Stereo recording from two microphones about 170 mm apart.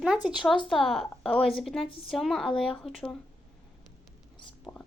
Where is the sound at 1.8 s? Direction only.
30° left (ahead or behind).